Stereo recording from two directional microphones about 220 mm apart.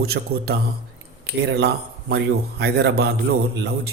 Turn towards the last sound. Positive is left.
turn(degrees=-50)  # may be behind; listen again after turning